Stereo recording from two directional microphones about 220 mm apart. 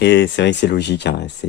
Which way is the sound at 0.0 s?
55° left (ahead or behind).